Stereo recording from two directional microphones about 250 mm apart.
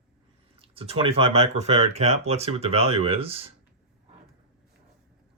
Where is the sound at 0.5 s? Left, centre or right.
Right.